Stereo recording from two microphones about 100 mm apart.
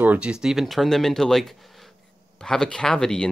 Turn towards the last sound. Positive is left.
turn(degrees=5)  # may be behind; listen again after turning